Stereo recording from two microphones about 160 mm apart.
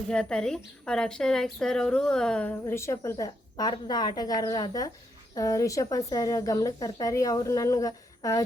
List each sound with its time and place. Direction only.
0.1 s a woman's voice: 5° left (ahead or behind); by 8.4 s 20° left (ahead or behind)